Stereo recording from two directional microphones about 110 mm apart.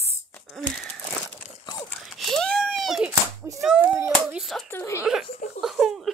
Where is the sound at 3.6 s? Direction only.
5° right (ahead or behind).